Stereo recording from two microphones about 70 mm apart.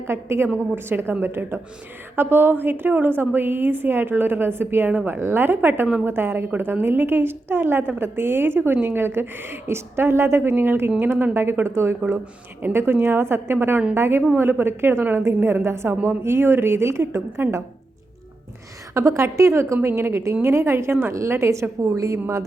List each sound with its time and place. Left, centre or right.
0.1 s a woman's voice: right
18.9 s a woman's voice: right